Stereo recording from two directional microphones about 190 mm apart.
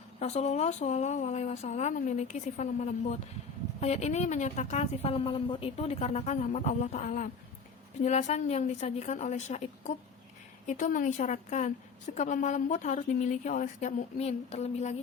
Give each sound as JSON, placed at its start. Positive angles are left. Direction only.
{"t": 0.2, "sound": "a woman's voice", "side_deg": 35}